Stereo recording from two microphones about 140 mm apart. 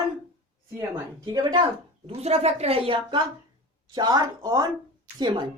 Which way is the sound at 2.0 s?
50° right (ahead or behind).